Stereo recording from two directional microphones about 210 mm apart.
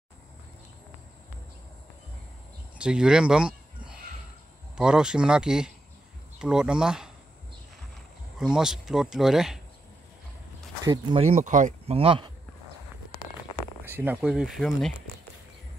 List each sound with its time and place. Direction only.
2.8 s speech: 5° right (ahead or behind)
8.4 s speech: 5° right (ahead or behind)
10.8 s speech: 25° right (ahead or behind)
13.8 s speech: 10° right (ahead or behind)